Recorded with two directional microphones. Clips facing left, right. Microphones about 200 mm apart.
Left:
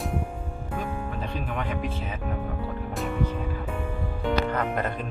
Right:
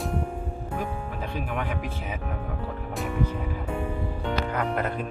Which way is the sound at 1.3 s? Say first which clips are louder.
Right 3 dB; 5° right (ahead or behind).